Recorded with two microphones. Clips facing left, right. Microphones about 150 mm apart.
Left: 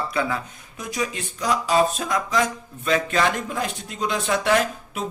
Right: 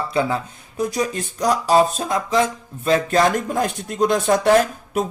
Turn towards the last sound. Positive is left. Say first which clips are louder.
# right 6 dB
turn(degrees=-45)  # may be behind; listen again after turning